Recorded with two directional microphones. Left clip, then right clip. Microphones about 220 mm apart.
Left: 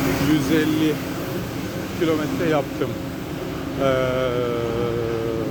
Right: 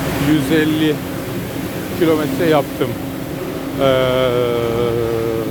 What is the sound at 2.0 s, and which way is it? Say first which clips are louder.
Mantra: right 7 dB; 25° right (ahead or behind).